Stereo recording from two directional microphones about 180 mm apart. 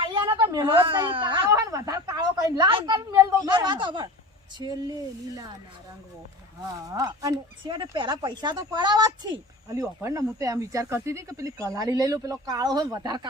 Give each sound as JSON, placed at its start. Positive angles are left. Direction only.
{"t": 0.0, "sound": "a sound", "side_deg": -25}
{"t": 0.3, "sound": "a woman's voice", "side_deg": -20}
{"t": 6.8, "sound": "speech", "side_deg": -20}